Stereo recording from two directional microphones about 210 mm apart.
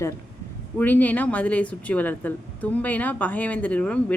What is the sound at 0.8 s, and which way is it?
Speech, 10° left (ahead or behind).